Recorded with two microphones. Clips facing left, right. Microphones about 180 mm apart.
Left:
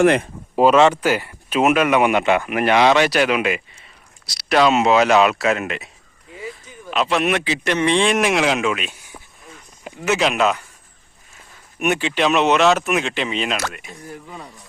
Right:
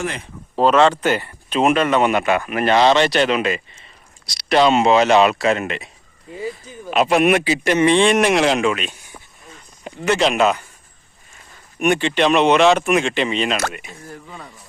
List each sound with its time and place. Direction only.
0.0 s speech: 65° left (ahead or behind)
0.5 s speech: 10° left (ahead or behind)
7.0 s a man's voice: 15° right (ahead or behind)
11.8 s speech: 5° left (ahead or behind)